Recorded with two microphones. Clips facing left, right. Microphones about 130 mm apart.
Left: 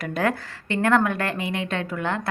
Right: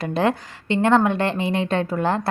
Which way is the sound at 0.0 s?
30° right (ahead or behind).